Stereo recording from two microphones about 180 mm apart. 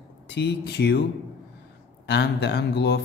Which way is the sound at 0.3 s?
70° left (ahead or behind).